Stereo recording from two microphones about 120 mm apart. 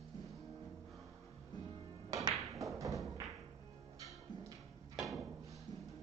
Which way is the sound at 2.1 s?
30° right (ahead or behind).